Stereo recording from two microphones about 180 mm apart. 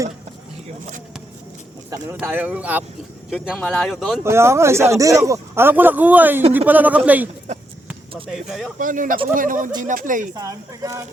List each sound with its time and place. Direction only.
2.1 s speech: 10° right (ahead or behind)
4.2 s speech: 15° right (ahead or behind)
8.3 s speech: centre (ahead or behind)
8.8 s speech: 50° right (ahead or behind)
10.3 s speech: 20° right (ahead or behind)